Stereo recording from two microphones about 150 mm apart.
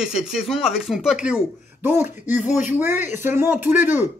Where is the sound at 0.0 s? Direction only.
5° right (ahead or behind).